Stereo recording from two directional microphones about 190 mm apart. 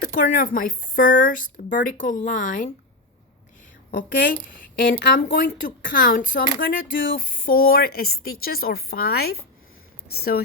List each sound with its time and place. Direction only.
0.0 s speech: 45° left (ahead or behind)
3.9 s speech: 45° left (ahead or behind)